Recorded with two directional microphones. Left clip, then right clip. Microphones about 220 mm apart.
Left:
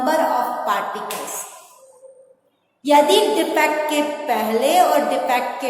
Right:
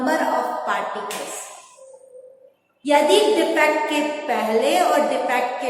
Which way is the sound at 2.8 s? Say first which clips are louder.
Left 2 dB; 30° left (ahead or behind).